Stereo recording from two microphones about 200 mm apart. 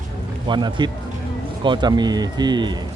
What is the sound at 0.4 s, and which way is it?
Speech, 25° right (ahead or behind).